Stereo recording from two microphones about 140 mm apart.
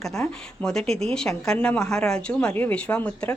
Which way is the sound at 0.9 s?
5° left (ahead or behind).